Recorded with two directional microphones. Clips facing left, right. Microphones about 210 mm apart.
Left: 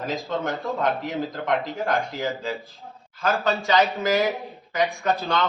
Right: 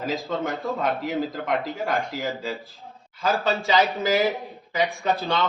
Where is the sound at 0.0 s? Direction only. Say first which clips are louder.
Even; centre (ahead or behind).